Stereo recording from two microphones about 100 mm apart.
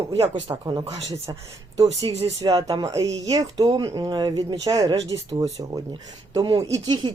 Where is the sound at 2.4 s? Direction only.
40° right (ahead or behind).